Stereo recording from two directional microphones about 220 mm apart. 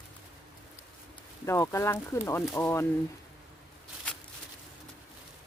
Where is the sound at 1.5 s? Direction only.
10° left (ahead or behind).